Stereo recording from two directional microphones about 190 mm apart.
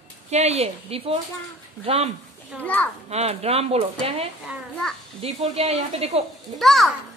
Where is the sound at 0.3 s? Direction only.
35° right (ahead or behind).